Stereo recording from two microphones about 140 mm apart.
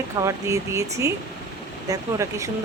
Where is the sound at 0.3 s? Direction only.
20° right (ahead or behind).